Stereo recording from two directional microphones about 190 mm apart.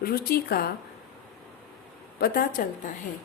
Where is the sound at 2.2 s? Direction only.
55° left (ahead or behind).